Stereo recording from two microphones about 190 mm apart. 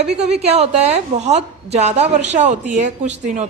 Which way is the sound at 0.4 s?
35° right (ahead or behind).